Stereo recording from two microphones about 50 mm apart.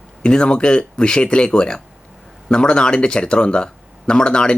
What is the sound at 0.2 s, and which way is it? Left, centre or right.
Speech, centre.